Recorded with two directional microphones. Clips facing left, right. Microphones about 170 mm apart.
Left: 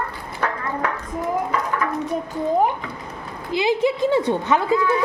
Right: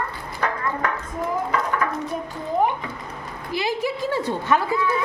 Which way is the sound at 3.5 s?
20° left (ahead or behind).